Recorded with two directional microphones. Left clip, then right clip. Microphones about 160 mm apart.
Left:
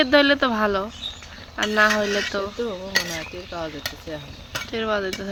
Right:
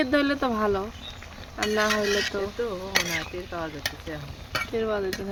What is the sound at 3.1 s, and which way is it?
Speech, 45° left (ahead or behind).